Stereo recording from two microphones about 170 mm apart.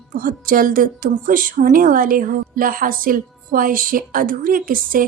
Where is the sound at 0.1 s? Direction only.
55° right (ahead or behind).